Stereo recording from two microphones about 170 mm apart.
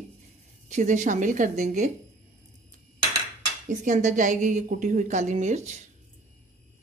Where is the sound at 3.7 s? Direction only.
45° right (ahead or behind).